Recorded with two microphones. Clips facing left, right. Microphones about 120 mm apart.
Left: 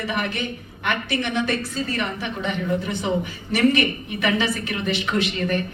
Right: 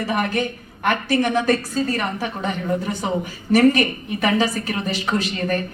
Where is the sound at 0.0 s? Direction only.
40° right (ahead or behind).